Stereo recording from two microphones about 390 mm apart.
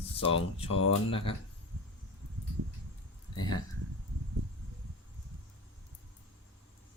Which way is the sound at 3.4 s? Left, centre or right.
Centre.